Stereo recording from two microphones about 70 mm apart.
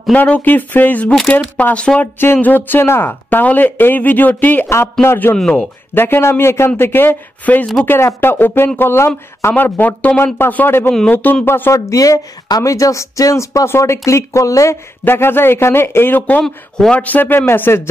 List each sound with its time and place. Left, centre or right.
0.1 s speech: left
2.0 s speech: left
9.5 s speech: left
11.7 s speech: left
15.0 s speech: left
16.4 s speech: centre
16.9 s speech: left